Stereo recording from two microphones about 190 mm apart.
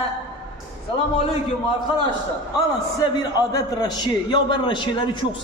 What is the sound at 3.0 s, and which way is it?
A man's voice, 20° left (ahead or behind).